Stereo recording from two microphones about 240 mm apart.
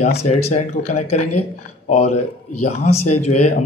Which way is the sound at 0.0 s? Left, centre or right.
Left.